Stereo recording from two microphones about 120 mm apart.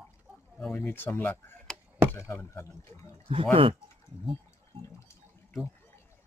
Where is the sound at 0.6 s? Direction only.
5° left (ahead or behind).